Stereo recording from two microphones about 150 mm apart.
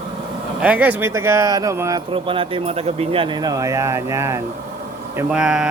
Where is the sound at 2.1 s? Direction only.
35° right (ahead or behind); by 4.4 s 20° right (ahead or behind).